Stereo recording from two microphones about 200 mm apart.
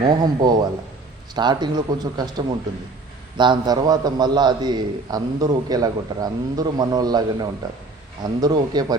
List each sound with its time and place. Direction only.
0.0 s a man's voice: 20° right (ahead or behind)